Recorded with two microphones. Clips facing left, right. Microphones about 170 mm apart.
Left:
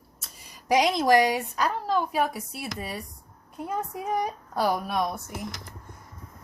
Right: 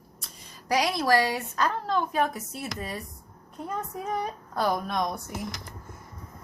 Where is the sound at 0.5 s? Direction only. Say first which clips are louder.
Left 4 dB; 20° left (ahead or behind).